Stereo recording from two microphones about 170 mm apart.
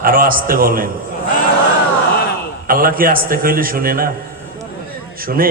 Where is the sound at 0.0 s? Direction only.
55° right (ahead or behind).